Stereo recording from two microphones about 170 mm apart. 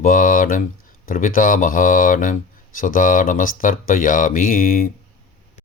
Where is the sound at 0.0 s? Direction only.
55° left (ahead or behind).